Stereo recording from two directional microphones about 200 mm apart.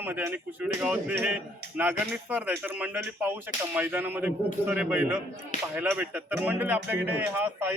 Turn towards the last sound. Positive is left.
turn(degrees=-10)  # may be behind; listen again after turning